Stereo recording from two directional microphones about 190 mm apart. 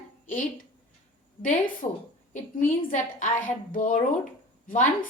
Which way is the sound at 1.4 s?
45° left (ahead or behind).